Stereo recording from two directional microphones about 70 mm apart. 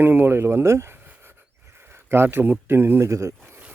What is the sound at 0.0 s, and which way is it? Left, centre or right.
Speech, right.